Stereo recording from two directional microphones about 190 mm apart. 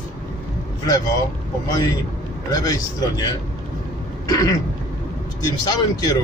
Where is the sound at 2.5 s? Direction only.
20° left (ahead or behind).